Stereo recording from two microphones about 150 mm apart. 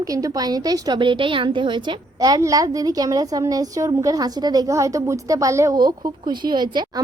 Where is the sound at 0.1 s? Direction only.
25° right (ahead or behind).